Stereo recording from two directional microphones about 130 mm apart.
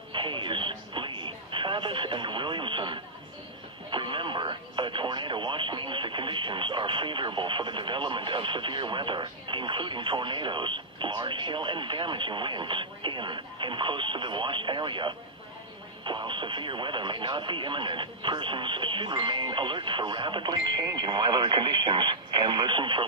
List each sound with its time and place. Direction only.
0.1 s a sound: 40° right (ahead or behind)
3.9 s radio: 40° right (ahead or behind)
16.0 s speech: 40° right (ahead or behind)